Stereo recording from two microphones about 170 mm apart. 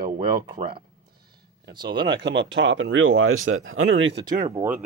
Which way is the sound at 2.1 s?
90° right.